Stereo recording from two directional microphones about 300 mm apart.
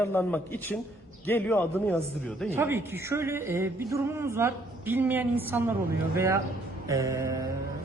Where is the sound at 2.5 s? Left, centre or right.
Centre.